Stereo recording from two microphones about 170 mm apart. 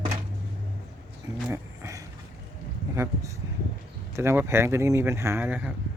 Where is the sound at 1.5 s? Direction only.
20° right (ahead or behind).